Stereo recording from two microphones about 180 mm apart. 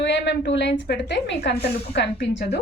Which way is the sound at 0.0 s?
75° left (ahead or behind).